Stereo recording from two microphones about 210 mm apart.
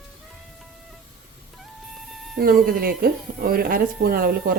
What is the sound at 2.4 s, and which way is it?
Speech, 45° right (ahead or behind).